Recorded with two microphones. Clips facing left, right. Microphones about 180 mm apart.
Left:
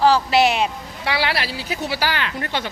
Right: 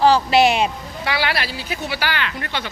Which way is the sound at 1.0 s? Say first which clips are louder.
Even; 30° left (ahead or behind).